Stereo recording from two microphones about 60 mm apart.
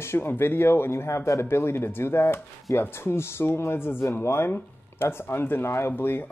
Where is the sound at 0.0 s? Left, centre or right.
Left.